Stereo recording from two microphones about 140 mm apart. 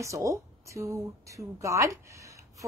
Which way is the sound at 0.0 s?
20° right (ahead or behind).